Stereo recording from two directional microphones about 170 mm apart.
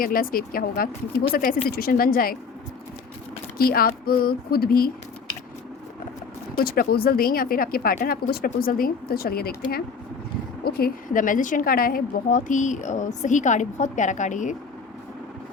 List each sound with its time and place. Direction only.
0.0 s speech: 55° left (ahead or behind)
3.6 s speech: 60° left (ahead or behind)
6.6 s a woman's voice: 65° left (ahead or behind); by 14.5 s 45° left (ahead or behind)